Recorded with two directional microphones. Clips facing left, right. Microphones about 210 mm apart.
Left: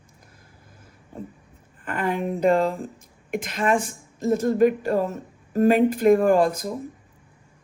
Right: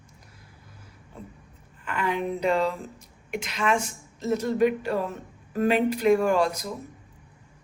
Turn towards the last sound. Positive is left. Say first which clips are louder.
# left 4 dB
turn(degrees=50)  # may be behind; listen again after turning